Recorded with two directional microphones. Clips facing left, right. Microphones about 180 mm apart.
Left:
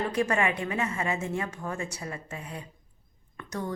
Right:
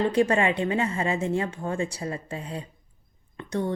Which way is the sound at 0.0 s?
30° right (ahead or behind).